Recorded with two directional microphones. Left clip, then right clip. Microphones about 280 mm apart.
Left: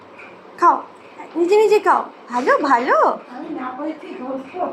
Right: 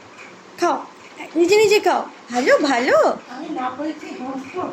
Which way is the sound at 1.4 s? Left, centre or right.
Centre.